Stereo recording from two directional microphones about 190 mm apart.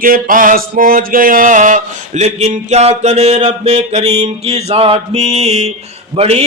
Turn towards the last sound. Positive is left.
turn(degrees=-30)  # may be behind; listen again after turning